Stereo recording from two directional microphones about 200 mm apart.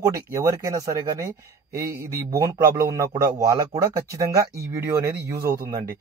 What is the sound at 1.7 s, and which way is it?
Speech, 50° right (ahead or behind).